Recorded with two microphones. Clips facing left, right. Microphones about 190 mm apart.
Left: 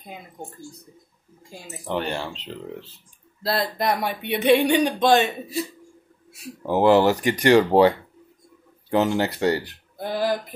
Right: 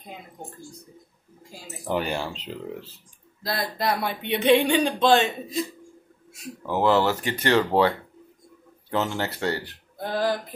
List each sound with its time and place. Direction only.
1.9 s speech: 5° right (ahead or behind)
3.4 s speech: 25° left (ahead or behind)
6.6 s speech: 15° left (ahead or behind)
8.9 s speech: 15° left (ahead or behind)